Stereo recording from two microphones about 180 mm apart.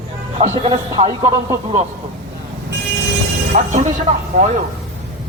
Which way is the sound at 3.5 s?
45° right (ahead or behind).